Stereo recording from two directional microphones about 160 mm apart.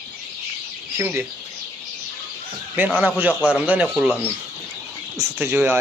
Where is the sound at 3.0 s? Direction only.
10° right (ahead or behind).